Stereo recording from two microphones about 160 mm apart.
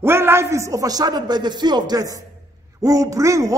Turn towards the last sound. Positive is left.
turn(degrees=-20)  # may be behind; listen again after turning